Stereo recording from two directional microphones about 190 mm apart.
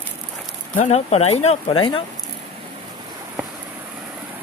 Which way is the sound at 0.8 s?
35° left (ahead or behind).